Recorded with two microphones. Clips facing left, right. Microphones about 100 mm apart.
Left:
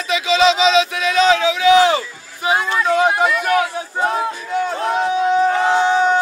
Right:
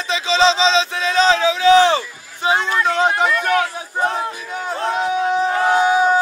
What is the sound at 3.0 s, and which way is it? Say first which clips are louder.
Speech: left 1 dB; 10° left (ahead or behind).